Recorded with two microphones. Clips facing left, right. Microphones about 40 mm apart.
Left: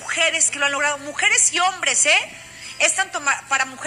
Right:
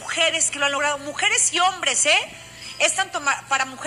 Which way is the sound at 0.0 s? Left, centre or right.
Left.